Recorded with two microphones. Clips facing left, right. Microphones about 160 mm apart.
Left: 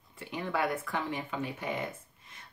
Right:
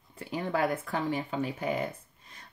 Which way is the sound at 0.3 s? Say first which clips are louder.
Right 3 dB; 35° right (ahead or behind).